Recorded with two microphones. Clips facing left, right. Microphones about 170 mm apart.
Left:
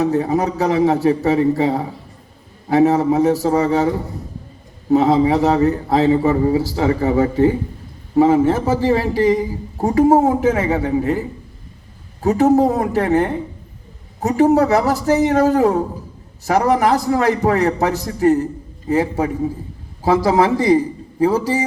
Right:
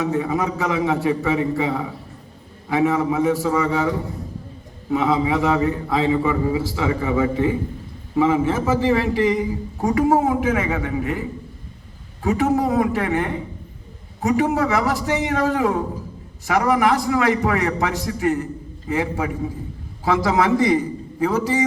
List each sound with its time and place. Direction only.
0.0 s a man's voice: 40° left (ahead or behind)